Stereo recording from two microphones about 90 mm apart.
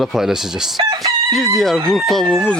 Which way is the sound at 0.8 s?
50° right (ahead or behind).